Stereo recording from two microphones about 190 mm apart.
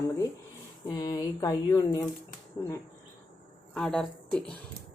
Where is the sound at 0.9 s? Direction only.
20° left (ahead or behind).